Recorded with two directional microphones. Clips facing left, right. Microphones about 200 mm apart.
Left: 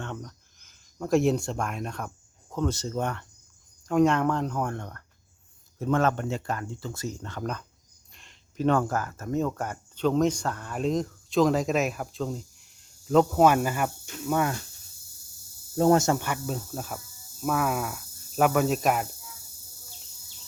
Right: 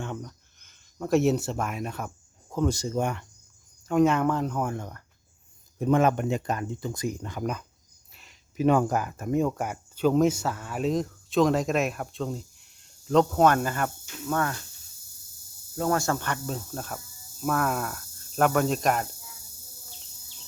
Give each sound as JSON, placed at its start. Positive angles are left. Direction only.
{"t": 0.0, "sound": "speech", "side_deg": -5}
{"t": 15.7, "sound": "speech", "side_deg": 25}